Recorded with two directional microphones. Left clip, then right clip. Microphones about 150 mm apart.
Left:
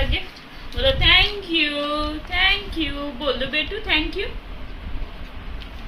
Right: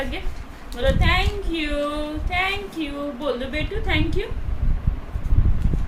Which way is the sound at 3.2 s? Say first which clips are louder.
Left 5 dB; 20° right (ahead or behind).